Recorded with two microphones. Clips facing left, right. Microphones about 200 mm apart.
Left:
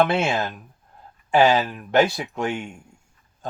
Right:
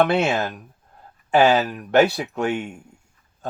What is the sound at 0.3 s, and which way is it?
Speech, 40° right (ahead or behind).